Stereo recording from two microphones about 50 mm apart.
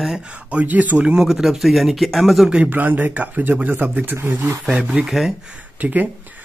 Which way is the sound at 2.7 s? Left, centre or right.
Right.